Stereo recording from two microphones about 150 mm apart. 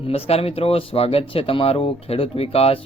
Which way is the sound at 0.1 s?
40° left (ahead or behind).